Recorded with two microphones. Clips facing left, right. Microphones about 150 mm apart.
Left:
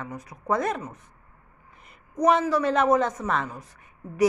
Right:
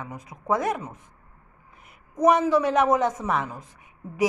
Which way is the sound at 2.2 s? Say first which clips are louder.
Right 2 dB; 15° right (ahead or behind).